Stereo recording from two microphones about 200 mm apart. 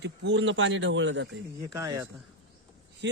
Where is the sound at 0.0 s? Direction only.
65° right (ahead or behind).